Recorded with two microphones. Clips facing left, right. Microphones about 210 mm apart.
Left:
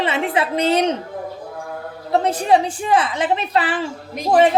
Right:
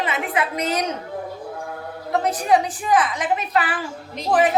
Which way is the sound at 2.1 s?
30° left (ahead or behind).